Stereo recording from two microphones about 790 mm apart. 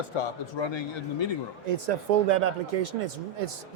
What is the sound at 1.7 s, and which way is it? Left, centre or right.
Speech, right.